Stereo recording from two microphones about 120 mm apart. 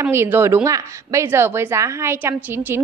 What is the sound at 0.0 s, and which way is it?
A woman's voice, 20° right (ahead or behind).